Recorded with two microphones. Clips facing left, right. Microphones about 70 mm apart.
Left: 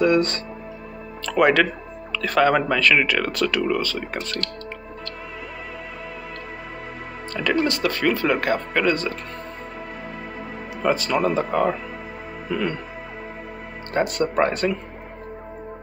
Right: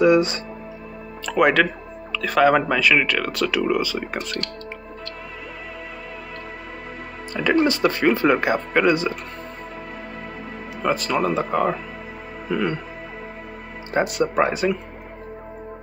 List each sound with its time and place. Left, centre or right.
0.0 s speech: centre
7.4 s speech: centre
10.8 s speech: centre
13.9 s speech: centre